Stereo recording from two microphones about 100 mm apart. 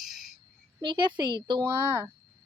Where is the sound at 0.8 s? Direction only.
50° right (ahead or behind).